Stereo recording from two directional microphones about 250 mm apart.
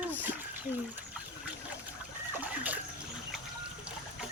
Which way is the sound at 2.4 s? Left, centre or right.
Centre.